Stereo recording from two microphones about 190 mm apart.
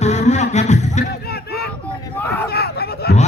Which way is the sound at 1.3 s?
55° left (ahead or behind).